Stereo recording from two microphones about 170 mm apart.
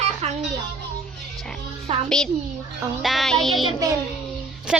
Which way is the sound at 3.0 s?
Centre (ahead or behind).